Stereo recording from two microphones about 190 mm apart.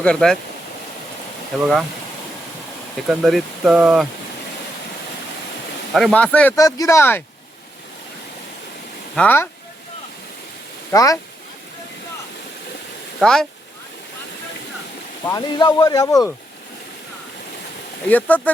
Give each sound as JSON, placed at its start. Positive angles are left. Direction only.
{"t": 0.0, "sound": "speech", "side_deg": 5}
{"t": 1.5, "sound": "speech", "side_deg": 0}
{"t": 3.1, "sound": "speech", "side_deg": 0}
{"t": 5.9, "sound": "speech", "side_deg": 0}
{"t": 9.1, "sound": "speech", "side_deg": 10}
{"t": 10.9, "sound": "speech", "side_deg": 20}
{"t": 13.1, "sound": "speech", "side_deg": 0}
{"t": 15.3, "sound": "speech", "side_deg": 20}
{"t": 18.1, "sound": "speech", "side_deg": 10}